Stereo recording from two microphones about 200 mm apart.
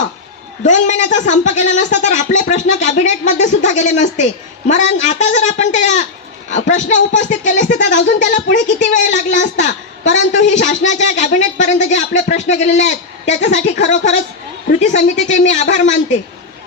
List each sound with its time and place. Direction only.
0.6 s speech: 35° left (ahead or behind)